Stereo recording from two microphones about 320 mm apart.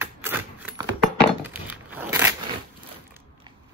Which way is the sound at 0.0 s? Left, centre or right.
Centre.